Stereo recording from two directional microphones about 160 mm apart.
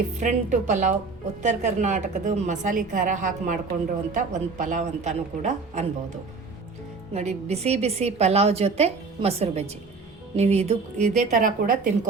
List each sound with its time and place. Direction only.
0.2 s a woman's voice: 50° right (ahead or behind)
7.1 s a woman's voice: 45° right (ahead or behind)